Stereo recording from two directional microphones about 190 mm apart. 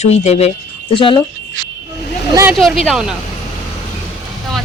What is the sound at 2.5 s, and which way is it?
Speech, centre (ahead or behind).